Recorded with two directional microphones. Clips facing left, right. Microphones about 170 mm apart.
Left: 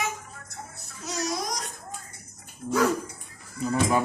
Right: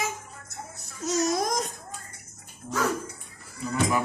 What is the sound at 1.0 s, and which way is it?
Speech, 45° right (ahead or behind).